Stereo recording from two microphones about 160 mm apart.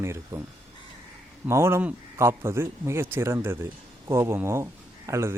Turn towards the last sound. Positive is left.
turn(degrees=-15)  # may be behind; listen again after turning